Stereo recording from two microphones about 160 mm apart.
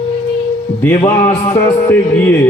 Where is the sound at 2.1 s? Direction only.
10° left (ahead or behind).